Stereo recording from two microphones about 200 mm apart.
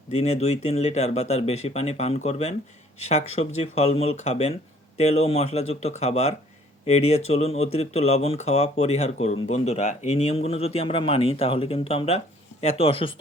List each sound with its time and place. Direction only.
0.1 s speech: 30° left (ahead or behind)